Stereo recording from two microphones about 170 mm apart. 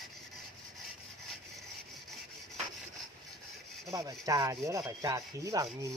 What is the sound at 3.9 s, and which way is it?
Rub, 20° right (ahead or behind).